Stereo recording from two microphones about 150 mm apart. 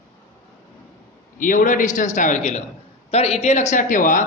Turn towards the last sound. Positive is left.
turn(degrees=60)  # may be behind; listen again after turning